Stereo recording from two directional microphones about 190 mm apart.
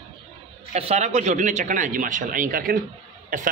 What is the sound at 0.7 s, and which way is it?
A man's voice, 35° right (ahead or behind).